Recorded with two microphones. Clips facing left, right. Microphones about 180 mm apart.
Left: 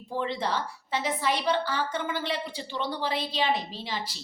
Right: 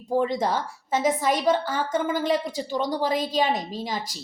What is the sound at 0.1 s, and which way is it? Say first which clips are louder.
A woman's voice: right 6 dB; 45° right (ahead or behind).